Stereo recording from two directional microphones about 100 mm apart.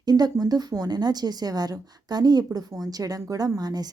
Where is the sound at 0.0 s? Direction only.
40° right (ahead or behind).